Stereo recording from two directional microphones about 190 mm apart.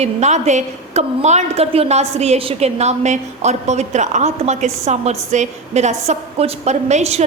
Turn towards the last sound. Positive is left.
turn(degrees=-35)  # may be behind; listen again after turning